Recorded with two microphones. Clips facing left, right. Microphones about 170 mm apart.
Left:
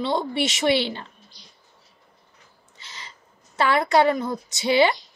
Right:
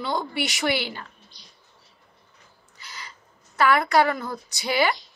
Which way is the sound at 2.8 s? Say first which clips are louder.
Right 1 dB; 25° left (ahead or behind).